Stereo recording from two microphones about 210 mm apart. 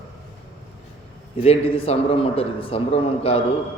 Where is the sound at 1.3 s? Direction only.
30° left (ahead or behind).